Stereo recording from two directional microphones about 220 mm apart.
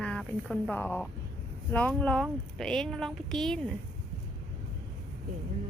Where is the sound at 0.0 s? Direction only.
5° left (ahead or behind).